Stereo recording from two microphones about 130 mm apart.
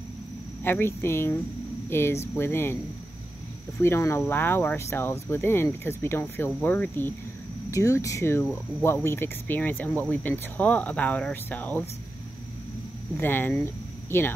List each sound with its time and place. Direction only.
0.7 s speech: 20° left (ahead or behind)
3.8 s speech: 20° left (ahead or behind)
13.2 s speech: 15° left (ahead or behind)